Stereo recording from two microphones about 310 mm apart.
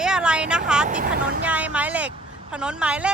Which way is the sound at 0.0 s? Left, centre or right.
Centre.